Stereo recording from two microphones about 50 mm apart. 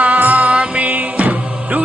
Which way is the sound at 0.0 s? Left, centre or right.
Right.